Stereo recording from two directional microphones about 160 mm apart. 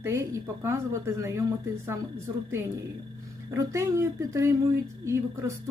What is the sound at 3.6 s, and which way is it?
Speech, 20° right (ahead or behind).